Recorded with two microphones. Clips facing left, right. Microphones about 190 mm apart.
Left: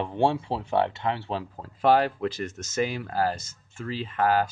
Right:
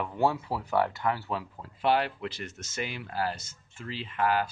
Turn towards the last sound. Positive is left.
turn(degrees=40)  # may be behind; listen again after turning